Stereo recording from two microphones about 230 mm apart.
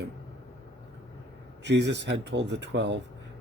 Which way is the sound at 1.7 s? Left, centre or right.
Right.